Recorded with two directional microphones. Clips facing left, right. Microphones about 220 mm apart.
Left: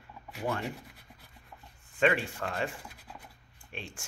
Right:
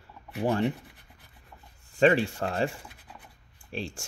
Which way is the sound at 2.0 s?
35° right (ahead or behind).